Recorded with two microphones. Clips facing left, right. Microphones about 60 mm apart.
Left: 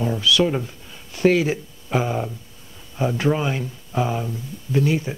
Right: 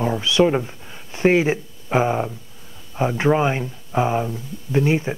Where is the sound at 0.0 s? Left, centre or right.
Right.